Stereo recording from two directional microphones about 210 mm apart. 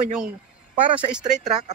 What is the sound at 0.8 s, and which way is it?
Speech, 25° right (ahead or behind).